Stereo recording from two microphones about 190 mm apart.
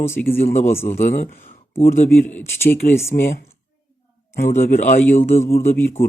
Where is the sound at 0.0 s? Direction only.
15° left (ahead or behind).